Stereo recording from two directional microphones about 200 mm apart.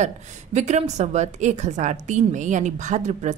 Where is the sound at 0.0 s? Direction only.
35° right (ahead or behind).